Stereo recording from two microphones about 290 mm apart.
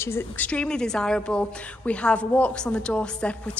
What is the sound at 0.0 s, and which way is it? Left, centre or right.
Speech, centre.